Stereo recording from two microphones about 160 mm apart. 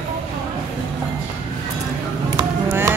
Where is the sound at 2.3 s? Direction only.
20° right (ahead or behind).